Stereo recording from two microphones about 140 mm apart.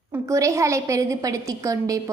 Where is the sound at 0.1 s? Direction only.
20° right (ahead or behind).